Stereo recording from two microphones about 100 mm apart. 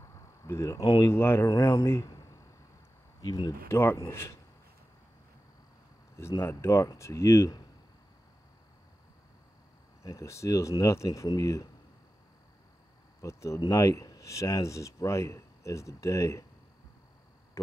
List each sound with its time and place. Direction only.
0.0 s a sound: 30° left (ahead or behind)
1.1 s speech: 25° left (ahead or behind)
3.2 s speech: 45° left (ahead or behind)
3.6 s speech: 25° left (ahead or behind)
6.1 s speech: 30° left (ahead or behind)
10.0 s speech: 30° left (ahead or behind)
13.2 s speech: 30° left (ahead or behind)